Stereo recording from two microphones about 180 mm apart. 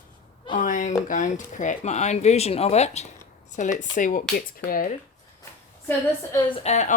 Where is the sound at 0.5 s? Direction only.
45° left (ahead or behind).